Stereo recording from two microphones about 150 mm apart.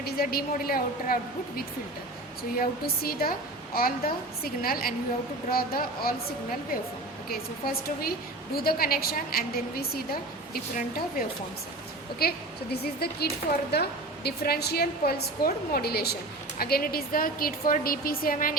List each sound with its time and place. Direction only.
0.0 s a woman's voice: 85° left
2.6 s a woman's voice: 90° left
7.3 s a woman's voice: 90° left
12.8 s a woman's voice: 90° left; by 18.5 s 70° left (ahead or behind)